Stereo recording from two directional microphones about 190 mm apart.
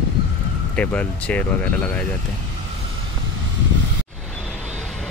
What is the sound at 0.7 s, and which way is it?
Speech, 5° left (ahead or behind).